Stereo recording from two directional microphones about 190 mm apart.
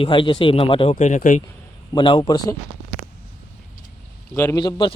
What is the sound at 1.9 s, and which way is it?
Speech, 25° left (ahead or behind).